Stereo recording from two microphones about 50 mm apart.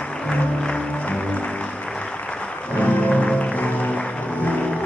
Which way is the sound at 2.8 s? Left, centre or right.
Left.